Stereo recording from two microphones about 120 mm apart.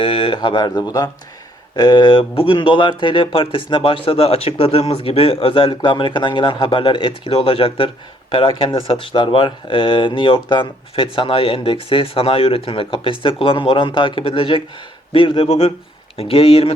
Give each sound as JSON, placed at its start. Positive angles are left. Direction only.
{"t": 0.0, "sound": "speech", "side_deg": 50}
{"t": 15.4, "sound": "speech", "side_deg": 60}
{"t": 16.1, "sound": "speech", "side_deg": 50}